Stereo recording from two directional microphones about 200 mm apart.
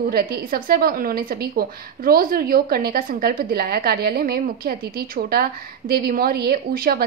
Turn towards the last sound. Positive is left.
turn(degrees=-50)  # may be behind; listen again after turning